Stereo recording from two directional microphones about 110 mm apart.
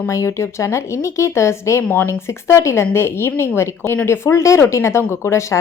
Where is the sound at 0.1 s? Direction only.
25° left (ahead or behind).